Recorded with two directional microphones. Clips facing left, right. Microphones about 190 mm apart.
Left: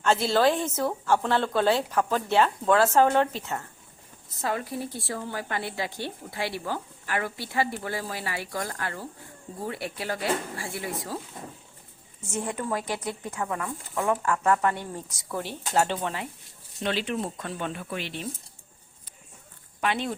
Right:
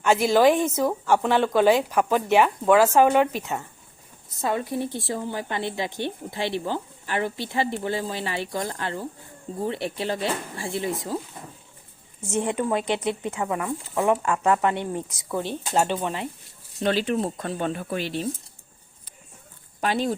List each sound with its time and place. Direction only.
0.0 s a woman's voice: 15° right (ahead or behind)
12.2 s speech: 25° right (ahead or behind)
16.8 s speech: 40° right (ahead or behind)
19.8 s speech: 35° right (ahead or behind)